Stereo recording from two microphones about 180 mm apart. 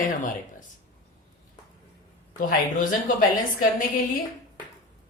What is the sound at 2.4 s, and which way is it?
A woman's voice, 50° left (ahead or behind).